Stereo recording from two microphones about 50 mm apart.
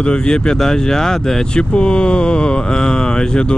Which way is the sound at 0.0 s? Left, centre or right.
Left.